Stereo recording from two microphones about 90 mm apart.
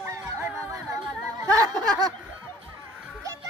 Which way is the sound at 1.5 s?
45° right (ahead or behind).